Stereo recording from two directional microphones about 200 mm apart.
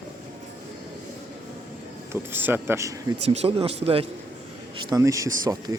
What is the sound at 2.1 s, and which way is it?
Speech, 10° right (ahead or behind).